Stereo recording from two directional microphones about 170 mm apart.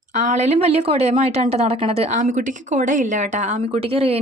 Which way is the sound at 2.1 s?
50° right (ahead or behind).